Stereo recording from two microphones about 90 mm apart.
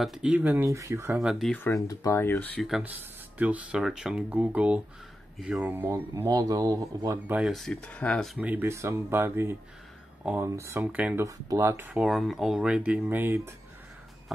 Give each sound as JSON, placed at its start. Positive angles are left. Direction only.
{"t": 0.0, "sound": "speech", "side_deg": -5}
{"t": 0.7, "sound": "speech", "side_deg": -35}
{"t": 1.2, "sound": "speech", "side_deg": 0}
{"t": 1.7, "sound": "speech", "side_deg": 35}
{"t": 2.8, "sound": "speech", "side_deg": -15}
{"t": 6.2, "sound": "speech", "side_deg": -45}
{"t": 7.4, "sound": "speech", "side_deg": 0}
{"t": 7.7, "sound": "speech", "side_deg": 15}
{"t": 8.4, "sound": "speech", "side_deg": -15}
{"t": 8.6, "sound": "speech", "side_deg": -30}
{"t": 10.8, "sound": "speech", "side_deg": -15}
{"t": 11.2, "sound": "speech", "side_deg": -35}
{"t": 12.0, "sound": "speech", "side_deg": 0}
{"t": 13.1, "sound": "speech", "side_deg": -25}